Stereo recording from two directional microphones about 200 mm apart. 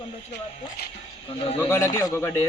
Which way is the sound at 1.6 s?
15° left (ahead or behind).